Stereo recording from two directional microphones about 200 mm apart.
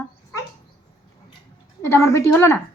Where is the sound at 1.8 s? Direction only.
15° left (ahead or behind).